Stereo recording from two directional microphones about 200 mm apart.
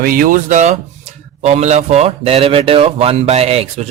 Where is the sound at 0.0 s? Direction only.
45° right (ahead or behind).